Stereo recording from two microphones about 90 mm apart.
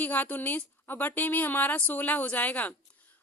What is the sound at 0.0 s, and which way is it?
Speech, 20° left (ahead or behind).